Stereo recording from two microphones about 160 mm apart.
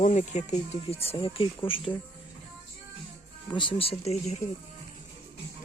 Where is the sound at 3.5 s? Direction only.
30° left (ahead or behind).